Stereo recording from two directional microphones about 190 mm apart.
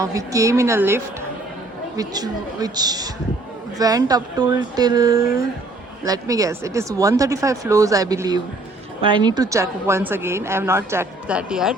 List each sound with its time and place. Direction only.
0.0 s a woman's voice: 15° right (ahead or behind)